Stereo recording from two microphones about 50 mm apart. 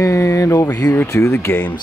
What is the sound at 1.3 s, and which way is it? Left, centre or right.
Speech, left.